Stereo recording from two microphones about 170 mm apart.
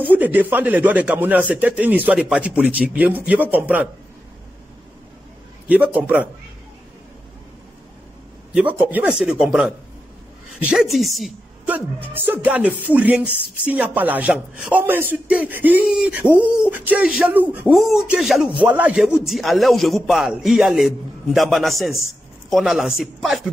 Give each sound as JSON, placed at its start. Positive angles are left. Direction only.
{"t": 0.0, "sound": "a woman's voice", "side_deg": -10}
{"t": 5.7, "sound": "a woman's voice", "side_deg": -10}
{"t": 8.5, "sound": "a woman's voice", "side_deg": -10}